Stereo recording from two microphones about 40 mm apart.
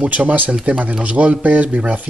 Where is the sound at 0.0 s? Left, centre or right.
Right.